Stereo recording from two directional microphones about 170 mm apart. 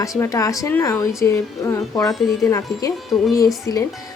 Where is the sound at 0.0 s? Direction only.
20° left (ahead or behind).